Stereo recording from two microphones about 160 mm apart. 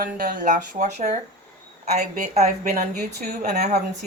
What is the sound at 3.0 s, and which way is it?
Speech, 65° right (ahead or behind).